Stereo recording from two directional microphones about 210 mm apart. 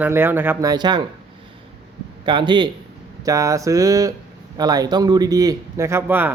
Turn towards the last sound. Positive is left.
turn(degrees=-10)  # may be behind; listen again after turning